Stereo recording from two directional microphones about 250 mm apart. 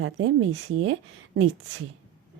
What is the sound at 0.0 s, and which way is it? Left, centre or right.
Speech, right.